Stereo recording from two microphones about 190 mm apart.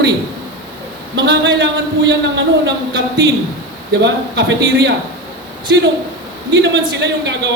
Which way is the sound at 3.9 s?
65° right (ahead or behind).